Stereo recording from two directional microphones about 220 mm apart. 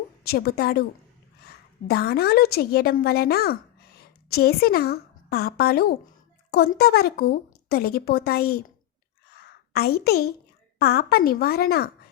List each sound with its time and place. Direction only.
0.3 s a woman's voice: 45° left (ahead or behind)
9.3 s a sound: 45° left (ahead or behind)
10.8 s a woman's voice: 45° left (ahead or behind)